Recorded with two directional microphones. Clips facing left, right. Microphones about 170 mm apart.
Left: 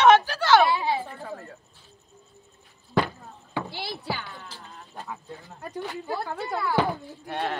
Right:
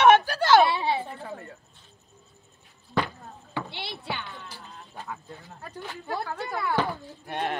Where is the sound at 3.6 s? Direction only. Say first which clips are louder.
Left 3 dB; centre (ahead or behind).